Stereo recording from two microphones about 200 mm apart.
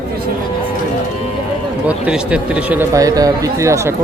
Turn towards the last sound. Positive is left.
turn(degrees=-15)  # may be behind; listen again after turning